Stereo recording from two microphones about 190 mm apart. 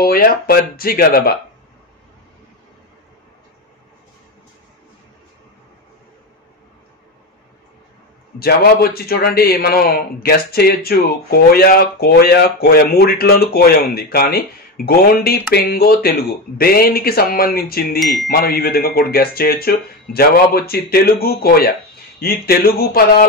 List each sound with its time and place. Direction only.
0.0 s a man's voice: 50° left (ahead or behind)
8.4 s a man's voice: 55° left (ahead or behind)
17.9 s speech: centre (ahead or behind)
18.3 s a man's voice: 50° left (ahead or behind)